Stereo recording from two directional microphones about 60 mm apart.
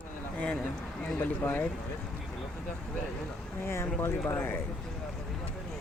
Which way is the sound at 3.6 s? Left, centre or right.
Left.